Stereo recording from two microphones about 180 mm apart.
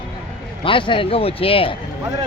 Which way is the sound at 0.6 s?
30° left (ahead or behind).